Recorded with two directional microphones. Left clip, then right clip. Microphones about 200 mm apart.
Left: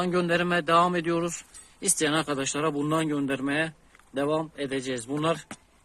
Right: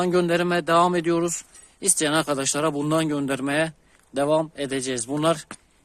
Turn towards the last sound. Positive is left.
turn(degrees=-65)  # may be behind; listen again after turning